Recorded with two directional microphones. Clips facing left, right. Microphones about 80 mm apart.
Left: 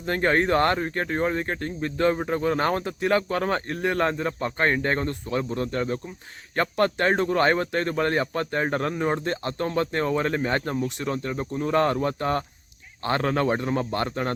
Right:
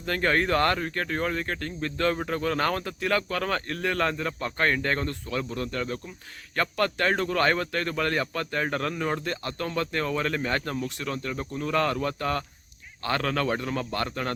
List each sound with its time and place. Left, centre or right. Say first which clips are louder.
0.0 s speech: left 3 dB; left